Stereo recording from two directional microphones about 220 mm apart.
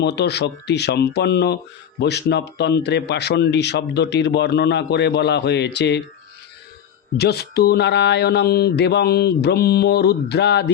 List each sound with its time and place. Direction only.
0.0 s a man's voice: 50° left (ahead or behind)
7.2 s a man's voice: 45° left (ahead or behind)